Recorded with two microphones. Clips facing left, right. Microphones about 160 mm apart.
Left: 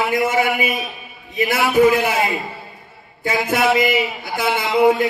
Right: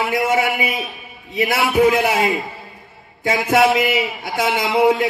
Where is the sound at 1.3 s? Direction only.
70° right (ahead or behind).